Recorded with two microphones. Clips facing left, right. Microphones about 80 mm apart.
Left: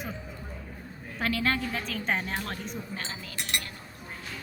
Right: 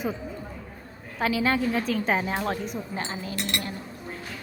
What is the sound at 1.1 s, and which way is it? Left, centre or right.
A woman's voice, centre.